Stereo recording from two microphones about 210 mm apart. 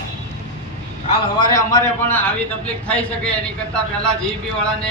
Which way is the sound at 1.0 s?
20° left (ahead or behind).